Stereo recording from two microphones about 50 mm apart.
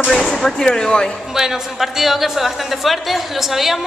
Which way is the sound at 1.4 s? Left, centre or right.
Centre.